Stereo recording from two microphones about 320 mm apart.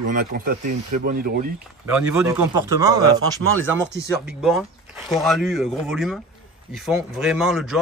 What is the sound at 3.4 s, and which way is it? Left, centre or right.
Speech, right.